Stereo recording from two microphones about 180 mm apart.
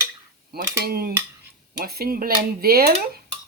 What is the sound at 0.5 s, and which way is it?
Cutlery, 60° right (ahead or behind).